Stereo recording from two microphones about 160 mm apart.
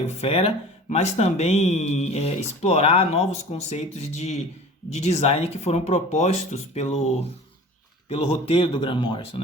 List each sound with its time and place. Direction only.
0.2 s speech: 40° left (ahead or behind)